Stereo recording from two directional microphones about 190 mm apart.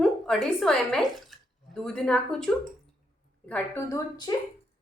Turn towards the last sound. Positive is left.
turn(degrees=15)  # may be behind; listen again after turning